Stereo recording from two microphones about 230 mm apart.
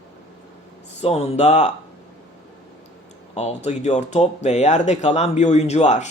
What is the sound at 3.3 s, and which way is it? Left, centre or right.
Speech, left.